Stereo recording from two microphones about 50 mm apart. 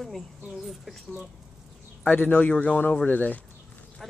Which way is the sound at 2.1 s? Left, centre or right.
Left.